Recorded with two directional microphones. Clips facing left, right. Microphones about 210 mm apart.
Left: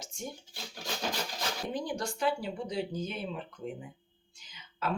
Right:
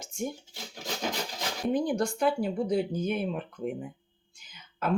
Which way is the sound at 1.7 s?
50° right (ahead or behind).